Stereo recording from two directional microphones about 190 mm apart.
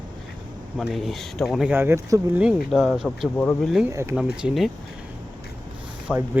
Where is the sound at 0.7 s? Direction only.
Centre (ahead or behind).